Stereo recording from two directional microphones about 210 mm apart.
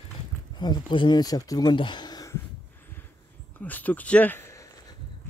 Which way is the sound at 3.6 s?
10° left (ahead or behind).